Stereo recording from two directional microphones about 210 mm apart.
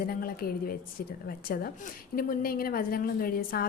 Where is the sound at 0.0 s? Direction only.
45° left (ahead or behind).